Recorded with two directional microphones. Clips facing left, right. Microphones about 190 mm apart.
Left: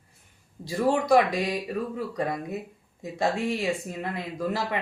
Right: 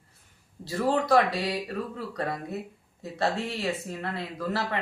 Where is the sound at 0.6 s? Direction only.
15° left (ahead or behind).